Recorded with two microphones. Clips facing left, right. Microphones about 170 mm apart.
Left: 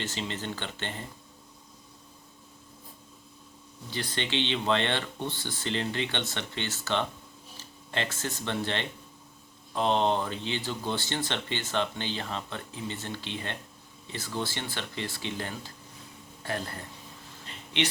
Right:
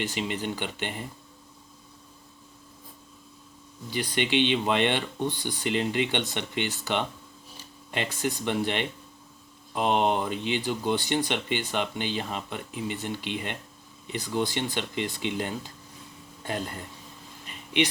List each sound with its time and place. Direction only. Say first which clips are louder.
0.0 s speech: right 4 dB; 15° right (ahead or behind)
3.8 s speech: right 5 dB; 15° right (ahead or behind)
17.4 s a sound: right 5 dB; 15° right (ahead or behind)